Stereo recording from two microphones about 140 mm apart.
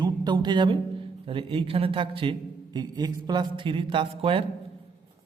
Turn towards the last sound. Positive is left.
turn(degrees=-40)  # may be behind; listen again after turning